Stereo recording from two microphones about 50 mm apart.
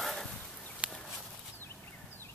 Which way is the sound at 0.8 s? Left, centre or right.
Right.